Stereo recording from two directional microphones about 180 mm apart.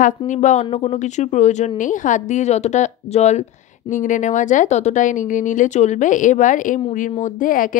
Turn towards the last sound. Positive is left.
turn(degrees=50)  # may be behind; listen again after turning